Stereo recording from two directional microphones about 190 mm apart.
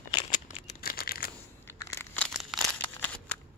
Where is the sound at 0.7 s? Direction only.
55° left (ahead or behind).